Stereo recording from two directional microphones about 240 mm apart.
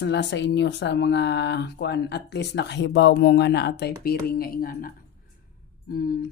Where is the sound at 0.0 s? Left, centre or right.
Left.